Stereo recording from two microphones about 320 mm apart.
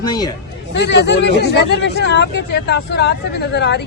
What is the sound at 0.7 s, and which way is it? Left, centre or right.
Speech, left.